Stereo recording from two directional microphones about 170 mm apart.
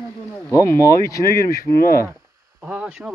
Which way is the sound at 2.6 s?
5° right (ahead or behind).